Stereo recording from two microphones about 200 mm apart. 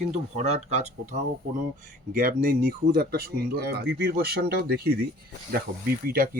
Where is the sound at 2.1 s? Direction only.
45° right (ahead or behind).